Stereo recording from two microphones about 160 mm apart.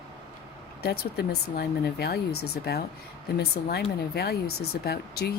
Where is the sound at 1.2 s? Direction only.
80° left.